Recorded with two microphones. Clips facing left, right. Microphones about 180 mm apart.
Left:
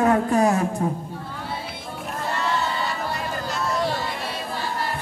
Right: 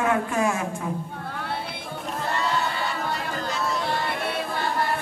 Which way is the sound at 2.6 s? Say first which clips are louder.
Left 1 dB; 60° right (ahead or behind).